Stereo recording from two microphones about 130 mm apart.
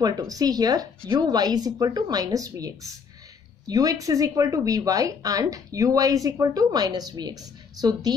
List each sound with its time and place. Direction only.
0.0 s speech: 30° right (ahead or behind)